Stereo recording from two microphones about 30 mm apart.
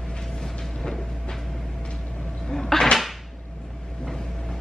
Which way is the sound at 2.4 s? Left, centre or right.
Left.